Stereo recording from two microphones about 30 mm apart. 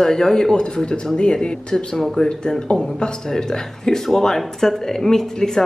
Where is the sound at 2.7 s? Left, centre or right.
Left.